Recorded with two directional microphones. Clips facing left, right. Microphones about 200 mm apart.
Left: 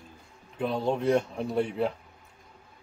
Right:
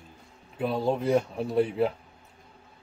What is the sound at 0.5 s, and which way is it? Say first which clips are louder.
Speech: right 1 dB; 5° right (ahead or behind).